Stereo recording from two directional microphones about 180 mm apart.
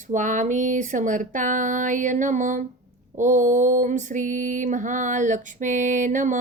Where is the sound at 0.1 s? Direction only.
45° right (ahead or behind).